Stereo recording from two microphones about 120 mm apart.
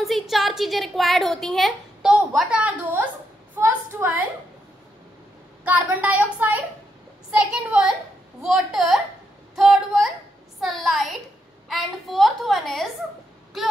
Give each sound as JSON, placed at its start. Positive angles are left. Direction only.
{"t": 0.0, "sound": "a woman's voice", "side_deg": 0}
{"t": 2.3, "sound": "a woman's voice", "side_deg": -10}
{"t": 5.7, "sound": "a woman's voice", "side_deg": -15}